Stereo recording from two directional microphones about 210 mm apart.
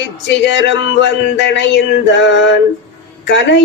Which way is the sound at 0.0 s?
55° left (ahead or behind).